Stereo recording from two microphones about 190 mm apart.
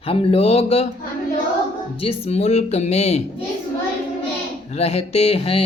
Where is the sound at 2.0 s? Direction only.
35° left (ahead or behind).